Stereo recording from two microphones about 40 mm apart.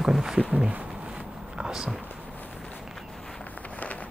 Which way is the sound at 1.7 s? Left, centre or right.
Centre.